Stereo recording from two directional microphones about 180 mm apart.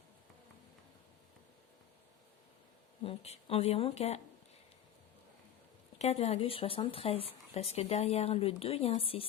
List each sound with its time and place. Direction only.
3.0 s speech: 35° left (ahead or behind)
6.0 s speech: 35° left (ahead or behind)